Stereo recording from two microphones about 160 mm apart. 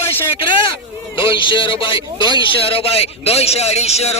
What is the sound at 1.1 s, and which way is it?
A man's voice, 30° left (ahead or behind).